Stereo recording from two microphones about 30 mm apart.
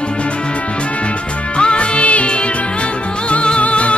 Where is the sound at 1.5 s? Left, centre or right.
Left.